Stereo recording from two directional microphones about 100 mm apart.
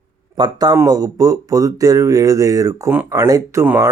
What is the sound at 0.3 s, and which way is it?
Speech, 45° right (ahead or behind).